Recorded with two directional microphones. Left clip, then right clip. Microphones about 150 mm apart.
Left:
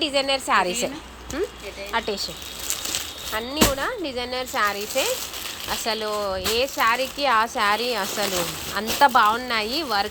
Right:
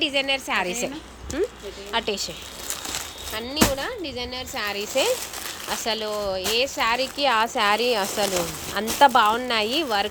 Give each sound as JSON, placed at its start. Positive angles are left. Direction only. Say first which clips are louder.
{"t": 0.0, "sound": "speech", "louder": "left 1 dB", "side_deg": -10}
{"t": 1.9, "sound": "speech", "louder": "even", "side_deg": -15}
{"t": 3.3, "sound": "speech", "louder": "left 1 dB", "side_deg": -10}